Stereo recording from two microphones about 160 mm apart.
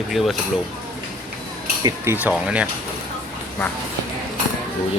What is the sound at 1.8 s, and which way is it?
Speech, 25° right (ahead or behind).